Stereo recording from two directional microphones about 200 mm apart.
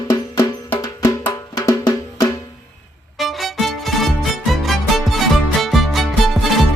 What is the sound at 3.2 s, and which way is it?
Music, centre (ahead or behind).